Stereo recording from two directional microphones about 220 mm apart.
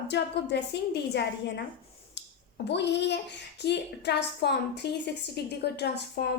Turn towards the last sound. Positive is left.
turn(degrees=50)  # may be behind; listen again after turning